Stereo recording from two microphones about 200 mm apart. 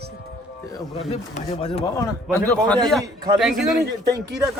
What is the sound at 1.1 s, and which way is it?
Speech, 30° left (ahead or behind).